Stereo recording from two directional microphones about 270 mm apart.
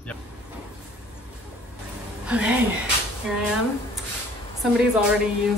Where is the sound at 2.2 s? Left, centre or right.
Centre.